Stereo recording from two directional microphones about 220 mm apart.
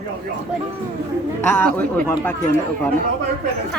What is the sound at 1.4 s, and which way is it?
Speech, 10° left (ahead or behind).